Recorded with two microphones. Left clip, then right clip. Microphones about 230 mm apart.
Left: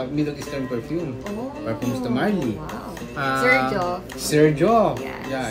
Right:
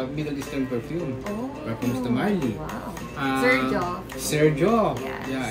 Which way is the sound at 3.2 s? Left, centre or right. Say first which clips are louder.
Left 3 dB; left.